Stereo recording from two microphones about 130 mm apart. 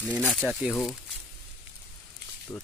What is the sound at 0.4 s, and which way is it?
Speech, 5° right (ahead or behind).